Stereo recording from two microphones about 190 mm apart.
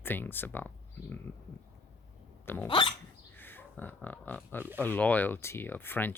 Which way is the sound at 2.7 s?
25° left (ahead or behind).